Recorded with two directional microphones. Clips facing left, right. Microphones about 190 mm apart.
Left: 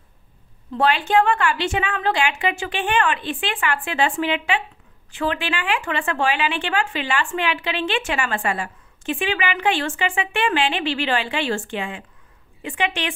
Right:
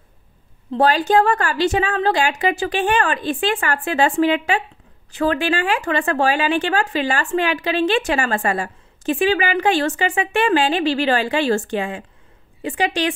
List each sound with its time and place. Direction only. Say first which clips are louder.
0.7 s speech: right 4 dB; 35° right (ahead or behind)